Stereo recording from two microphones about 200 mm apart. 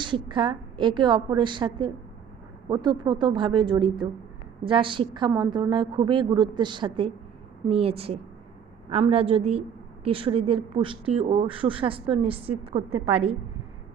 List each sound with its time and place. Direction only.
0.0 s a woman's voice: 25° right (ahead or behind)